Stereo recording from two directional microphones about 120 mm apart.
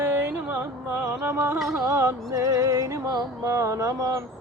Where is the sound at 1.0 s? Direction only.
20° right (ahead or behind).